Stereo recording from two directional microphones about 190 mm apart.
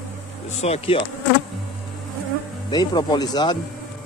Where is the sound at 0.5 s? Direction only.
35° left (ahead or behind).